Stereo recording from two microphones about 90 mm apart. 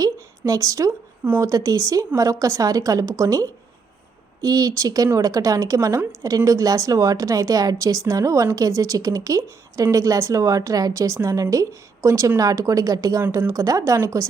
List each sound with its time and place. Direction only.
0.0 s a woman's voice: 40° right (ahead or behind)